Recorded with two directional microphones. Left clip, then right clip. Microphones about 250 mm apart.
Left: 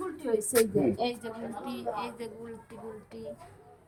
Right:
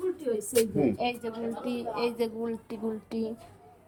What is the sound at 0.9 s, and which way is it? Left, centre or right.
A woman's voice, centre.